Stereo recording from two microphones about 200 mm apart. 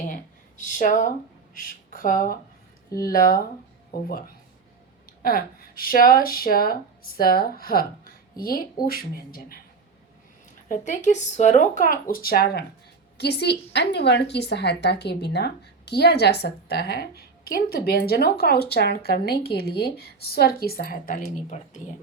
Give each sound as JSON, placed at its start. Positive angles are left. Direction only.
{"t": 0.1, "sound": "a woman's voice", "side_deg": 40}
{"t": 10.7, "sound": "a woman's voice", "side_deg": 35}